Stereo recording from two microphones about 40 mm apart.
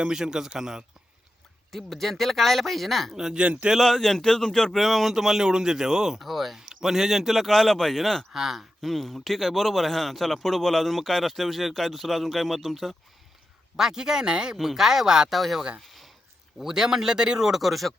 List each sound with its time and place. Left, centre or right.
0.0 s speech: centre
1.7 s a man's voice: centre
3.1 s speech: centre
3.3 s speech: right
3.8 s a man's voice: centre
7.3 s a man's voice: centre
8.3 s speech: centre
8.8 s a man's voice: centre
13.7 s speech: centre
14.5 s speech: centre
15.3 s a man's voice: centre
15.8 s a sound: centre
16.6 s speech: centre